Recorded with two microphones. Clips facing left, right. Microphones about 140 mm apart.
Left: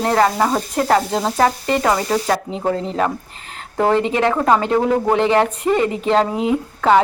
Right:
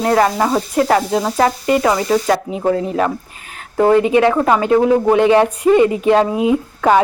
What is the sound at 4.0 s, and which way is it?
Speech, 10° right (ahead or behind).